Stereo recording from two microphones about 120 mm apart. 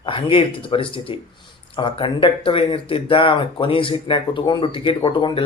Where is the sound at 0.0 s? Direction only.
45° left (ahead or behind).